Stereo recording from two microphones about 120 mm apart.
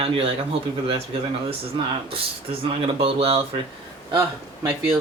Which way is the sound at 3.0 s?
50° right (ahead or behind).